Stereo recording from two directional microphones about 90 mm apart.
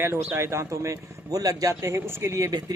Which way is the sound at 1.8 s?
30° right (ahead or behind).